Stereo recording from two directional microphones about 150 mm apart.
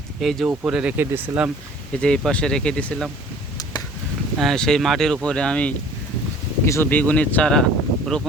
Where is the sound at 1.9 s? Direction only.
5° left (ahead or behind).